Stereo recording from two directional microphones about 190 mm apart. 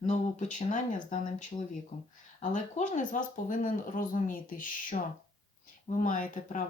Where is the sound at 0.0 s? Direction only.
40° left (ahead or behind).